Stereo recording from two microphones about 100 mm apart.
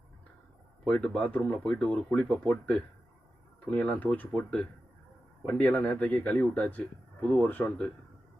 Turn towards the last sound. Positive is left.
turn(degrees=15)  # may be behind; listen again after turning